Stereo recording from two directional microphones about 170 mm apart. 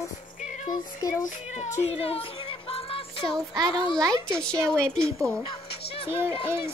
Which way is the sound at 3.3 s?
20° right (ahead or behind).